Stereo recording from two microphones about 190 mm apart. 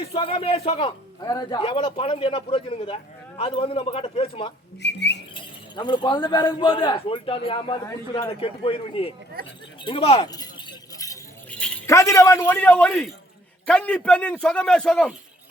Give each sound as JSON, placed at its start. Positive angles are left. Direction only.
{"t": 0.0, "sound": "a man's voice", "side_deg": 30}
{"t": 4.8, "sound": "a sound", "side_deg": 65}
{"t": 5.3, "sound": "a man's voice", "side_deg": 25}
{"t": 10.2, "sound": "keys jangling", "side_deg": 20}
{"t": 11.5, "sound": "a sound", "side_deg": 5}
{"t": 11.9, "sound": "a man's voice", "side_deg": 15}